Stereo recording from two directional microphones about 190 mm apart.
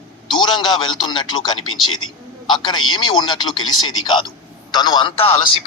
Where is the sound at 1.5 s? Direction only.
90° left.